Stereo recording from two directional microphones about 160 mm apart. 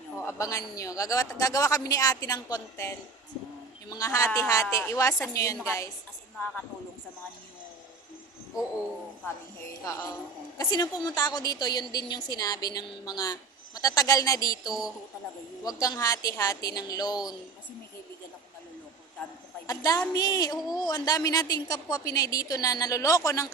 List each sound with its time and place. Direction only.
0.2 s a woman's voice: 20° left (ahead or behind)
9.8 s a woman's voice: 20° left (ahead or behind)
14.7 s speech: 5° right (ahead or behind)
15.6 s a woman's voice: 20° left (ahead or behind)
19.6 s a woman's voice: 20° left (ahead or behind)